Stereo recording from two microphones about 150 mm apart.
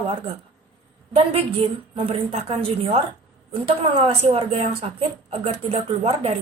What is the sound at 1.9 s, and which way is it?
A woman's voice, 40° right (ahead or behind).